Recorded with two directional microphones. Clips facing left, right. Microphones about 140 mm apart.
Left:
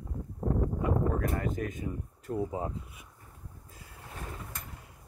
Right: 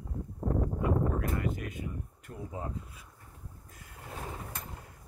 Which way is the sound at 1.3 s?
45° left (ahead or behind).